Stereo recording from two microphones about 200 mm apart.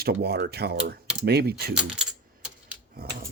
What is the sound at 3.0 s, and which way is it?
Dog, 50° right (ahead or behind).